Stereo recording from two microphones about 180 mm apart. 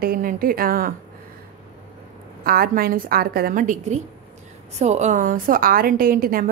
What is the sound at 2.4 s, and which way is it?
A woman's voice, 55° right (ahead or behind).